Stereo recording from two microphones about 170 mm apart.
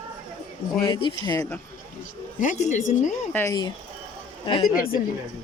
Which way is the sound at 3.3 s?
15° left (ahead or behind).